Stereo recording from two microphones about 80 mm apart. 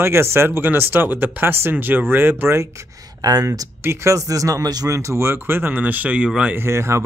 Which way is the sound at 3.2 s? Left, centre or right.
Right.